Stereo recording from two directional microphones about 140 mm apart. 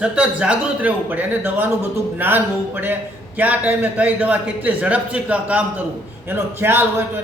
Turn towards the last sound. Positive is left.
turn(degrees=-15)  # may be behind; listen again after turning